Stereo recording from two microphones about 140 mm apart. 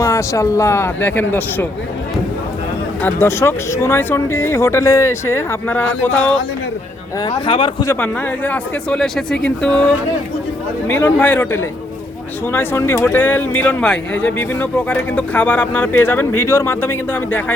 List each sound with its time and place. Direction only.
0.0 s speech: 20° left (ahead or behind)
3.0 s speech: 15° left (ahead or behind)
7.4 s speech: 35° left (ahead or behind)
7.9 s speech: 15° left (ahead or behind)
10.8 s speech: 15° left (ahead or behind)